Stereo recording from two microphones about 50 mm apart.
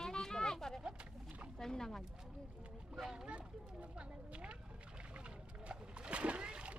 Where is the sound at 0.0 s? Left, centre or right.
Centre.